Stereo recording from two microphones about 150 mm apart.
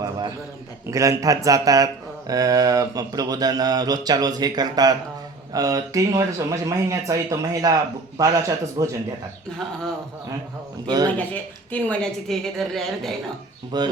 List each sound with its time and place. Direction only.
0.9 s speech: 20° right (ahead or behind)
10.8 s speech: 30° right (ahead or behind)
11.7 s a woman's voice: 5° left (ahead or behind)
13.7 s speech: 30° right (ahead or behind)